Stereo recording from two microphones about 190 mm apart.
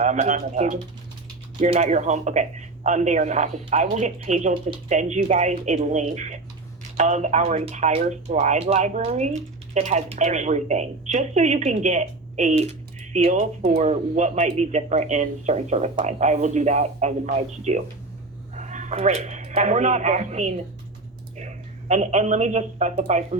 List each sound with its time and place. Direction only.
0.0 s speech: 40° right (ahead or behind)